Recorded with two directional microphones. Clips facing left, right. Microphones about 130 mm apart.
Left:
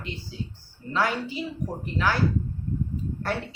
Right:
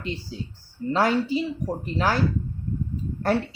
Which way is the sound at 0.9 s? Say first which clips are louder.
Right 4 dB; 35° right (ahead or behind).